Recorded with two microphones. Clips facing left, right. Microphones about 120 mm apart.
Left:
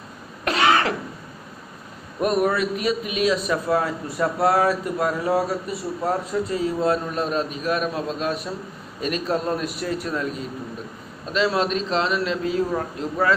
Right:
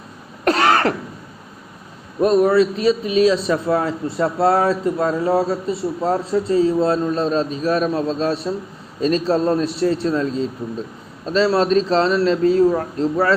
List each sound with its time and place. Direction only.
0.4 s throat clearing: 40° right (ahead or behind)
2.2 s a man's voice: 30° right (ahead or behind)